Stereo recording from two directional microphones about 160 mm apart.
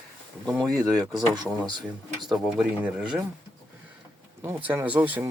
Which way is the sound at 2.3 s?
Centre (ahead or behind).